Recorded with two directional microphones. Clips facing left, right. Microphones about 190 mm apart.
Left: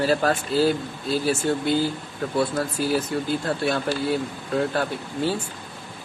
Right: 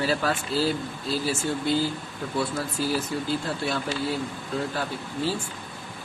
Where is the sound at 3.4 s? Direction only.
55° left (ahead or behind).